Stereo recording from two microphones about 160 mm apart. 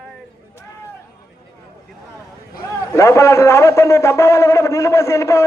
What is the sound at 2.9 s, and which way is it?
A man's voice, 20° left (ahead or behind).